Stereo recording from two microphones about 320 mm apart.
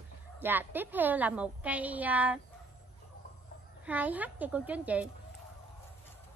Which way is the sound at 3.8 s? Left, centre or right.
Centre.